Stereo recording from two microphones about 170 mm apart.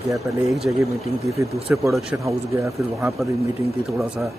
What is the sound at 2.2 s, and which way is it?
Speech, 15° right (ahead or behind).